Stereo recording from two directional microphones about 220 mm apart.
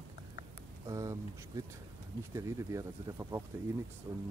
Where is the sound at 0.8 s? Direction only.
15° right (ahead or behind).